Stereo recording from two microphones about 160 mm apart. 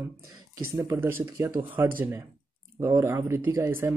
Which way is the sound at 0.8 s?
15° right (ahead or behind).